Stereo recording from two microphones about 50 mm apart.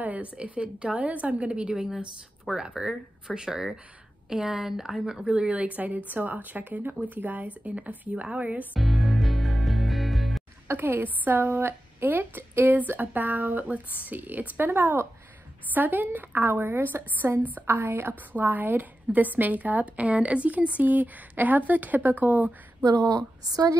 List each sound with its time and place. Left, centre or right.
0.0 s a woman's voice: right
5.3 s a woman's voice: right
8.7 s music: centre
10.8 s a woman's voice: right